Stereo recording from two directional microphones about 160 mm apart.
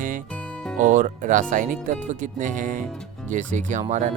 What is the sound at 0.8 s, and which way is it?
Speech, 50° right (ahead or behind).